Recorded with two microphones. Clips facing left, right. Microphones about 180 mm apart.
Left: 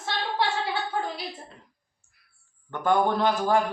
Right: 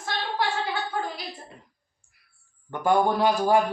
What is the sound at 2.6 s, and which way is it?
Speech, 10° right (ahead or behind).